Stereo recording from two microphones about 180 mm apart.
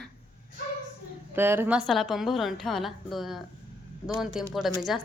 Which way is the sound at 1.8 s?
Centre (ahead or behind).